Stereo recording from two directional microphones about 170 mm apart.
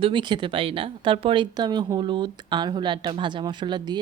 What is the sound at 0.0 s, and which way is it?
A woman's voice, 25° right (ahead or behind).